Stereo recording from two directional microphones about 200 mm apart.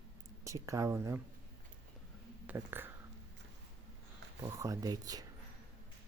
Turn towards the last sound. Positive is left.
turn(degrees=-20)  # may be behind; listen again after turning